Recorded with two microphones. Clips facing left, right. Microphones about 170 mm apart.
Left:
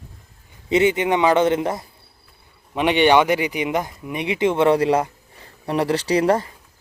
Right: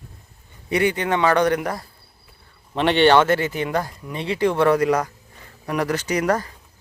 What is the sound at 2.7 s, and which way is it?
Speech, 10° left (ahead or behind).